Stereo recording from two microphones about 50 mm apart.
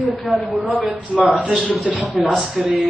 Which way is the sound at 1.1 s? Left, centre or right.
Right.